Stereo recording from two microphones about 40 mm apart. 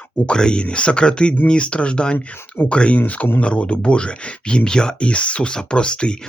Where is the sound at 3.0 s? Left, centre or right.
Left.